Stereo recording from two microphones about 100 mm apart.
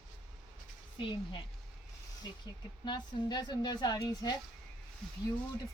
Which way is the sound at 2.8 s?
45° left (ahead or behind).